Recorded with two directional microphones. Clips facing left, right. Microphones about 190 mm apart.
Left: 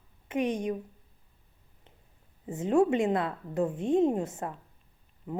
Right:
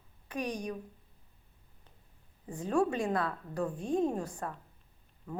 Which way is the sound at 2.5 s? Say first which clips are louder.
Left 6 dB; 20° left (ahead or behind).